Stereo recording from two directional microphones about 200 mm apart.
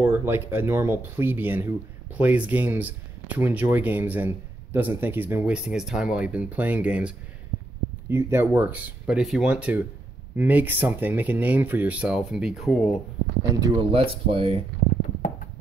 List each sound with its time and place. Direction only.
0.0 s speech: 10° right (ahead or behind)
13.5 s speech: 15° right (ahead or behind)
13.9 s speech: 30° right (ahead or behind)